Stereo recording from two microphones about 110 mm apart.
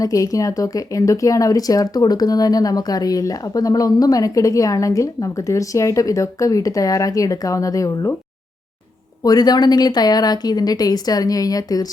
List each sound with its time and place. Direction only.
0.0 s speech: 30° left (ahead or behind)
9.2 s speech: 35° left (ahead or behind)